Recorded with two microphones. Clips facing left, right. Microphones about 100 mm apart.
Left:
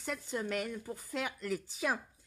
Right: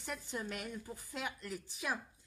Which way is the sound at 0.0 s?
80° left.